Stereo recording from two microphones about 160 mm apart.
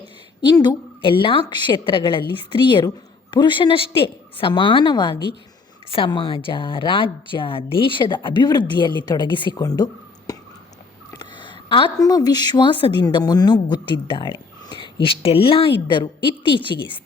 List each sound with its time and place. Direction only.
0.5 s a woman's voice: 25° left (ahead or behind)